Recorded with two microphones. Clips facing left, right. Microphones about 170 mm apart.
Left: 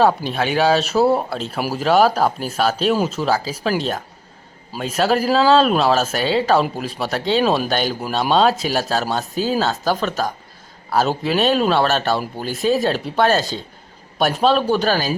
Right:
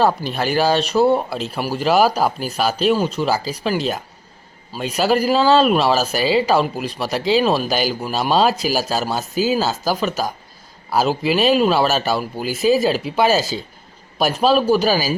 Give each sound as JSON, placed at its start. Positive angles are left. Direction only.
{"t": 0.0, "sound": "speech", "side_deg": 0}